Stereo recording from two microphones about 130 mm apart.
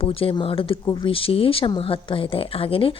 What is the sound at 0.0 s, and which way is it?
A woman's voice, 45° left (ahead or behind).